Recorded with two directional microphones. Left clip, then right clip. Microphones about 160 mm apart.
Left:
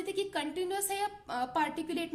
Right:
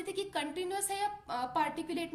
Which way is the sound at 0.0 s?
35° left (ahead or behind).